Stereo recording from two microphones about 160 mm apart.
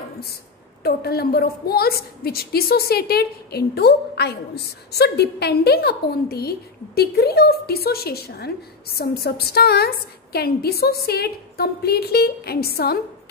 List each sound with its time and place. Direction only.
0.8 s a woman's voice: 80° left